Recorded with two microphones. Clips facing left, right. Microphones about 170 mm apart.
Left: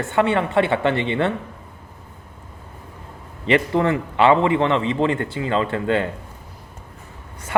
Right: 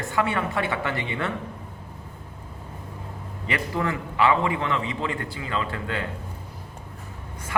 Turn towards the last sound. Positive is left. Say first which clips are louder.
# left 9 dB
turn(degrees=30)  # may be behind; listen again after turning